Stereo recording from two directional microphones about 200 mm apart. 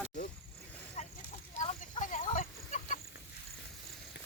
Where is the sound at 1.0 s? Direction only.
35° left (ahead or behind).